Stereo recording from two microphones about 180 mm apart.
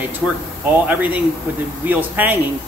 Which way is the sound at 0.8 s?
10° right (ahead or behind).